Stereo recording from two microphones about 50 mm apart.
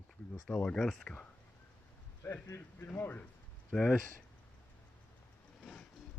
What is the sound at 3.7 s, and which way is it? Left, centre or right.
Speech, centre.